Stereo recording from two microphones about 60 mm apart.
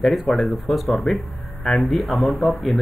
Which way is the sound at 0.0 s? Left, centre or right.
Centre.